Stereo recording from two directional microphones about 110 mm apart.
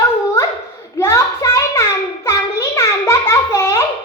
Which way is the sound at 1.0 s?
25° left (ahead or behind).